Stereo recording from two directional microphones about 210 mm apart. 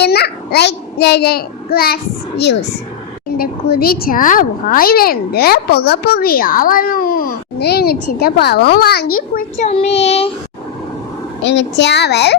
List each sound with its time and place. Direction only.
0.0 s a child's voice: 50° left (ahead or behind); by 10.3 s 30° left (ahead or behind)
11.4 s a child's voice: 55° left (ahead or behind)